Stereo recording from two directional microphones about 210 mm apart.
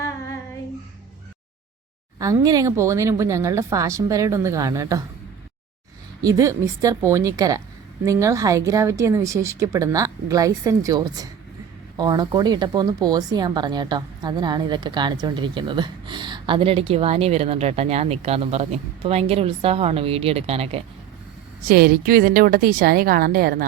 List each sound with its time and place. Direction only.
2.1 s a woman's voice: 15° right (ahead or behind)
6.2 s a woman's voice: 15° right (ahead or behind)
21.7 s a woman's voice: 45° right (ahead or behind)